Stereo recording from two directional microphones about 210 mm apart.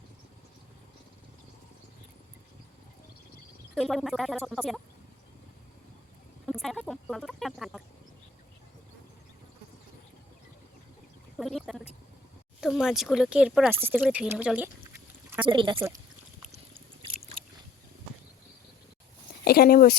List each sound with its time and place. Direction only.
3.8 s speech: centre (ahead or behind)
6.4 s speech: centre (ahead or behind)
11.3 s a sound: centre (ahead or behind)
12.5 s speech: centre (ahead or behind)
15.4 s speech: 25° right (ahead or behind)
19.5 s speech: 45° left (ahead or behind)